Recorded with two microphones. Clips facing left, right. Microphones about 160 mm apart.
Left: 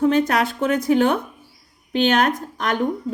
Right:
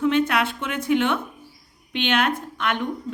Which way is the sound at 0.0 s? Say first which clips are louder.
Left 3 dB; 40° left (ahead or behind).